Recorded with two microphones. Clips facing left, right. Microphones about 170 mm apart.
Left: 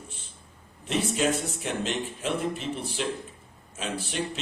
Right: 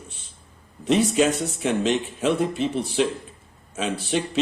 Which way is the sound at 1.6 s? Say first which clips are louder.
Right 10 dB; 90° right.